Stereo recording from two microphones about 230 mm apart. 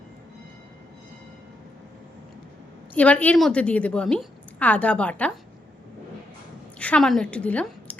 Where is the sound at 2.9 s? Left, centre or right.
Centre.